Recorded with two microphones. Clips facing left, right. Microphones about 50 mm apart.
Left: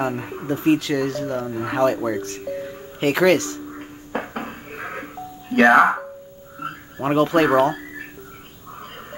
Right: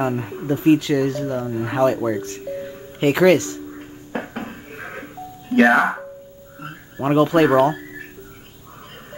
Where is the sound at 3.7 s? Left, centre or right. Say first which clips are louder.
Left 1 dB; centre.